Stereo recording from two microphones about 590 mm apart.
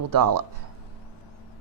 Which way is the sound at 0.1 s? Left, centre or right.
Right.